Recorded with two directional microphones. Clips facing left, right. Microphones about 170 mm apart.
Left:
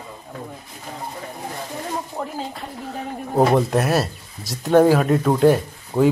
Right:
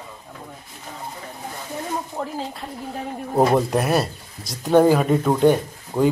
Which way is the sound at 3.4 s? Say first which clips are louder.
Left 1 dB; centre (ahead or behind).